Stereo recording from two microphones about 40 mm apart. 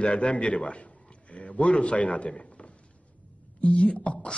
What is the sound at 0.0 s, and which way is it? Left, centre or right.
A man's voice, left.